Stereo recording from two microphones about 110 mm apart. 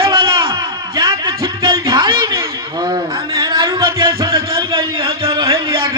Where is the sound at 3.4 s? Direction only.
35° right (ahead or behind).